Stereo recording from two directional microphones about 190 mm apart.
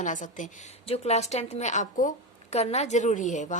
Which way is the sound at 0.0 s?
40° left (ahead or behind).